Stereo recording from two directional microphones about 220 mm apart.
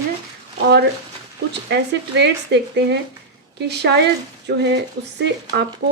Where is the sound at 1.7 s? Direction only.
50° right (ahead or behind).